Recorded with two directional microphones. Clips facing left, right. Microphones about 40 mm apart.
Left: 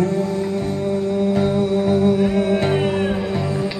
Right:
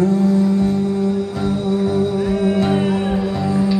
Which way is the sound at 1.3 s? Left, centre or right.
Left.